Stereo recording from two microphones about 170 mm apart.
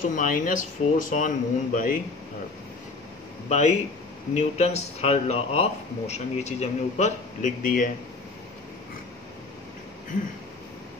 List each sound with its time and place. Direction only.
0.1 s speech: 50° left (ahead or behind)
3.4 s speech: 45° left (ahead or behind)